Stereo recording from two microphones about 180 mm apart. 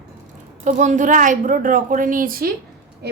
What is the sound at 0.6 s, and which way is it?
A woman's voice, 45° right (ahead or behind).